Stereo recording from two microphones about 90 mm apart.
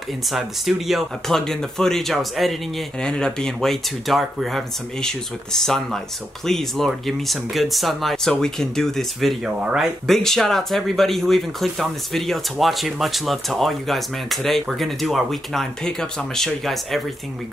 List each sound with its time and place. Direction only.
0.3 s speech: 5° right (ahead or behind)